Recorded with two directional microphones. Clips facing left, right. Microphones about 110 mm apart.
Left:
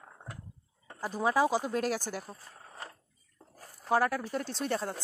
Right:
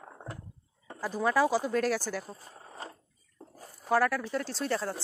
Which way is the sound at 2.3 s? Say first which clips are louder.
Right 3 dB; 25° right (ahead or behind).